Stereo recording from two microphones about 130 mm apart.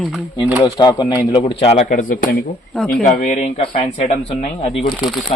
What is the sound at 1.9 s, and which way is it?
Speech, 90° left.